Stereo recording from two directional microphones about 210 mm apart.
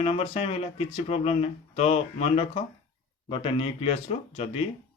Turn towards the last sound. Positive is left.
turn(degrees=30)  # may be behind; listen again after turning